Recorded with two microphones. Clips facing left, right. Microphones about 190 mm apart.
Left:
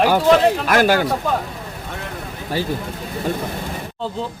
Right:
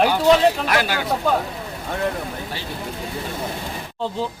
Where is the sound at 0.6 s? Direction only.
45° left (ahead or behind).